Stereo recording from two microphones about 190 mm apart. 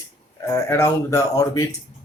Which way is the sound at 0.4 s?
15° left (ahead or behind).